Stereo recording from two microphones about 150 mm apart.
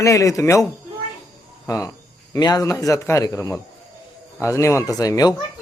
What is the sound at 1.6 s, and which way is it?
A man's voice, 20° left (ahead or behind).